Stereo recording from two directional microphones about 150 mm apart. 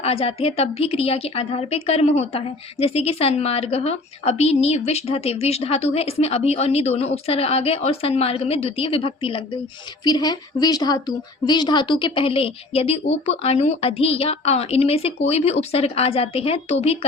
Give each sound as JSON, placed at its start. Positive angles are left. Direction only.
{"t": 0.0, "sound": "a woman's voice", "side_deg": 40}